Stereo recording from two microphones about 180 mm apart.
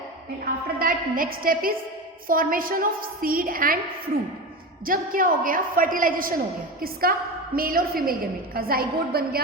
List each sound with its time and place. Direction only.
0.4 s a woman's voice: 50° right (ahead or behind)
4.9 s a woman's voice: 50° right (ahead or behind)